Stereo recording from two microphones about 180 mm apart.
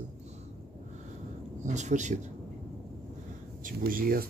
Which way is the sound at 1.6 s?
40° right (ahead or behind).